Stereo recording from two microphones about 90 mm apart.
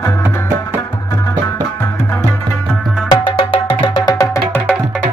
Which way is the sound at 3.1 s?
80° left.